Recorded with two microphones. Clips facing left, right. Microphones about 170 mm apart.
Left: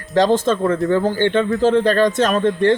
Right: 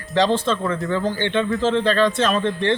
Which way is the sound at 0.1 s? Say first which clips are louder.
Left 4 dB; 45° left (ahead or behind).